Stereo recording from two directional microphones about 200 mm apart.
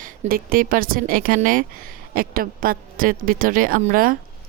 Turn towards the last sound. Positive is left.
turn(degrees=-45)  # may be behind; listen again after turning